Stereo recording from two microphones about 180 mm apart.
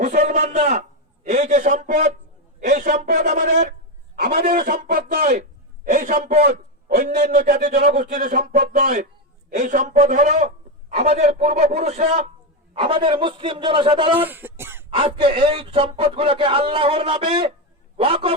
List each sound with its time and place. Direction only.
0.0 s a sound: 40° right (ahead or behind)
1.2 s a man's voice: 40° right (ahead or behind)
9.6 s a man's voice: 40° right (ahead or behind)
14.2 s speech: 10° right (ahead or behind)
14.8 s a man's voice: 30° right (ahead or behind)